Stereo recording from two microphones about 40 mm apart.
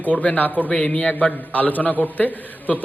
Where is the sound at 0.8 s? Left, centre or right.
Left.